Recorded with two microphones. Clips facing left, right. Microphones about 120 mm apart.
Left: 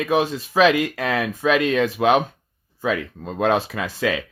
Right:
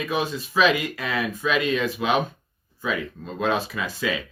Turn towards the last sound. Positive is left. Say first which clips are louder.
# left 4 dB
turn(degrees=75)  # may be behind; listen again after turning